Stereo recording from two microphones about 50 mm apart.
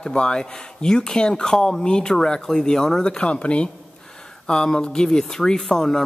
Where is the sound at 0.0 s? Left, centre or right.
Centre.